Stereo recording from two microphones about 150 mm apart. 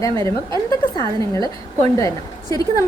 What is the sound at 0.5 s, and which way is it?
A woman's voice, 25° left (ahead or behind).